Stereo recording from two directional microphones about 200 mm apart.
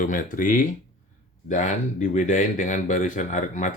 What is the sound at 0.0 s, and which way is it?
Speech, 40° left (ahead or behind).